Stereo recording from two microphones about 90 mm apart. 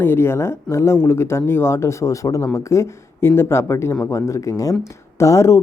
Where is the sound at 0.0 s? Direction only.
25° left (ahead or behind).